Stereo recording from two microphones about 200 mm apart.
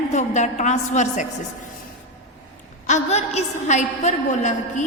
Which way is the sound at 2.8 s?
35° left (ahead or behind).